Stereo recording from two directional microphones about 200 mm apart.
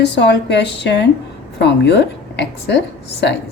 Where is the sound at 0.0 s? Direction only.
60° left (ahead or behind).